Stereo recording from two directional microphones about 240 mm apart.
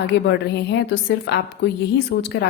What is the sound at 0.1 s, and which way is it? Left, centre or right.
A woman's voice, left.